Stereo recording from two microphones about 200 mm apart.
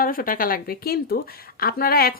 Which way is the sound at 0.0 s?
45° left (ahead or behind).